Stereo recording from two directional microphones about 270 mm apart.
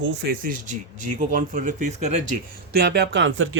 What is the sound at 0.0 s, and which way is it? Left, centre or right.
Speech, right.